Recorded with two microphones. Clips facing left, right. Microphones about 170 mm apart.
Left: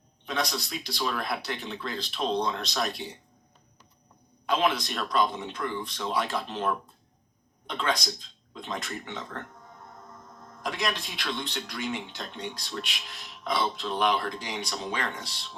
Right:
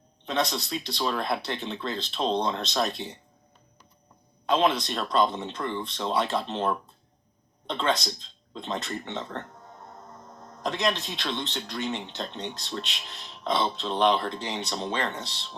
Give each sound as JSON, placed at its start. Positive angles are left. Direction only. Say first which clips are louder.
{"t": 0.3, "sound": "speech", "louder": "right 3 dB", "side_deg": -25}
{"t": 4.4, "sound": "speech", "louder": "right 3 dB", "side_deg": -25}